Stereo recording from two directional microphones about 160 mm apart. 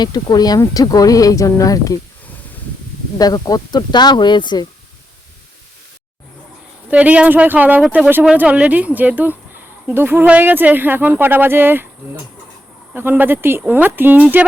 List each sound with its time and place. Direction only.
0.0 s speech: 25° left (ahead or behind)
3.2 s speech: 25° left (ahead or behind)
6.9 s speech: 10° right (ahead or behind)
12.9 s speech: 10° right (ahead or behind)